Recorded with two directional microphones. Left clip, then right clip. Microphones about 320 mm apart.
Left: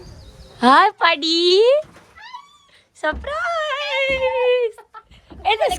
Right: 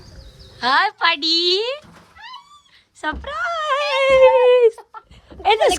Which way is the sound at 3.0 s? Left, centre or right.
Centre.